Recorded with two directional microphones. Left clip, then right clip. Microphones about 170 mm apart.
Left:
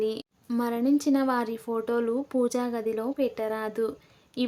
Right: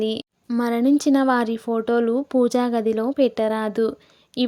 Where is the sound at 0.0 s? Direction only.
40° right (ahead or behind).